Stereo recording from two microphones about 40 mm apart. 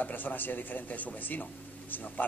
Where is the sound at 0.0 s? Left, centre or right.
Left.